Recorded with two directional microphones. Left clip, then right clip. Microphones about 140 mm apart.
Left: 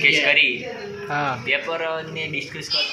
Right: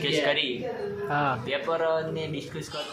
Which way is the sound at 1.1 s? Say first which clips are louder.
Left 5 dB; 5° left (ahead or behind).